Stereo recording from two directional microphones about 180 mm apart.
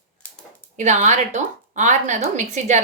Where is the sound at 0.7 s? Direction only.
40° right (ahead or behind).